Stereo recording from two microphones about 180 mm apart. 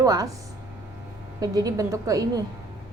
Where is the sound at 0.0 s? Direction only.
20° right (ahead or behind).